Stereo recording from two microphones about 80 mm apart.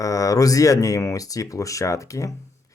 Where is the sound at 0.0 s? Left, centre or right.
Left.